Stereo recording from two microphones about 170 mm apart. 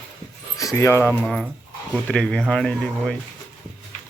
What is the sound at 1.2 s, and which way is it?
Speech, 5° left (ahead or behind).